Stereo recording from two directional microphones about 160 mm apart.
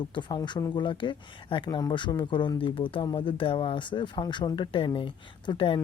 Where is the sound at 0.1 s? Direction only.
30° left (ahead or behind).